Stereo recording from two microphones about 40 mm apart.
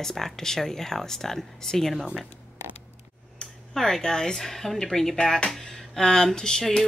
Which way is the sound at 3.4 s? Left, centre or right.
Centre.